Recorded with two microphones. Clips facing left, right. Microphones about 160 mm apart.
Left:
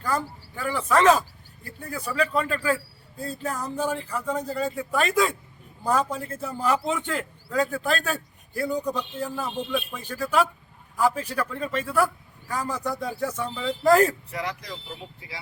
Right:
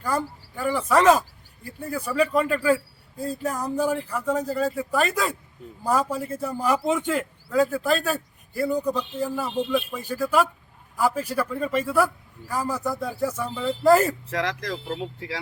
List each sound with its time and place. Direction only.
0.0 s a man's voice: 10° right (ahead or behind)
14.3 s speech: 90° right